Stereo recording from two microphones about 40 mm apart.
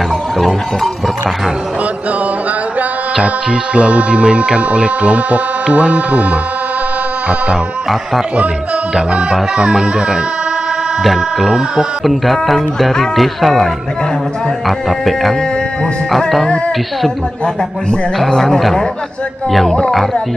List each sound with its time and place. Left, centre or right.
3.7 s speech: right
9.1 s music: right
11.3 s speech: centre
16.2 s music: centre
18.4 s speech: centre